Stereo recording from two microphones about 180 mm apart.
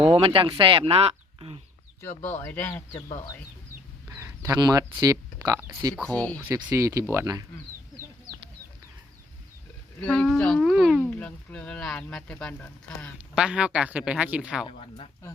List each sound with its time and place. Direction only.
0.1 s speech: 30° right (ahead or behind)
2.0 s speech: 10° left (ahead or behind)
4.1 s speech: 15° right (ahead or behind)
6.0 s a man's voice: 5° left (ahead or behind)
6.4 s speech: 15° right (ahead or behind)
10.0 s a man's voice: 5° left (ahead or behind)
11.0 s speech: 10° left (ahead or behind)
13.1 s a man's voice: 5° right (ahead or behind)
14.7 s speech: 30° left (ahead or behind)